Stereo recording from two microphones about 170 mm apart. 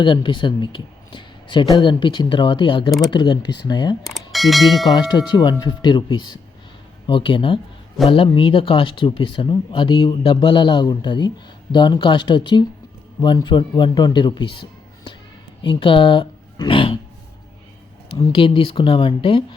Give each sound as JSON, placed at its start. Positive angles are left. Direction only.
{"t": 0.0, "sound": "speech", "side_deg": 30}
{"t": 4.0, "sound": "speech", "side_deg": 0}
{"t": 4.9, "sound": "speech", "side_deg": 25}
{"t": 18.3, "sound": "speech", "side_deg": 30}